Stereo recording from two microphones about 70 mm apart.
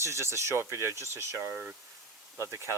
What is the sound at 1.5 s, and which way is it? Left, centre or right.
Speech, centre.